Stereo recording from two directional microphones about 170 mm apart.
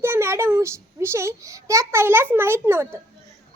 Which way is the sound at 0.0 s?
15° right (ahead or behind).